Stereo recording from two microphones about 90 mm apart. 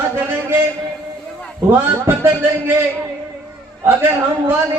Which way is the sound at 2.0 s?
25° right (ahead or behind).